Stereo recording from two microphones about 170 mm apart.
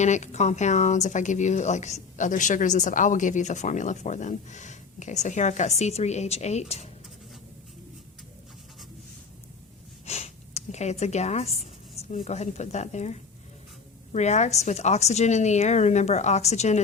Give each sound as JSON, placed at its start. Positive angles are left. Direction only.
{"t": 0.0, "sound": "speech", "side_deg": 45}
{"t": 10.1, "sound": "a woman's voice", "side_deg": 40}